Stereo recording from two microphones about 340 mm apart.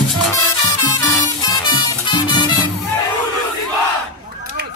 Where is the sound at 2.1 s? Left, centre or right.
Centre.